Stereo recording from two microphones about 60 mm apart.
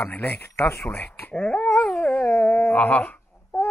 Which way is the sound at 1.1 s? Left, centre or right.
Left.